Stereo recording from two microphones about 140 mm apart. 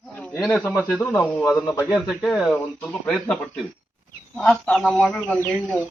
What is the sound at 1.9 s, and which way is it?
A man's voice, centre (ahead or behind).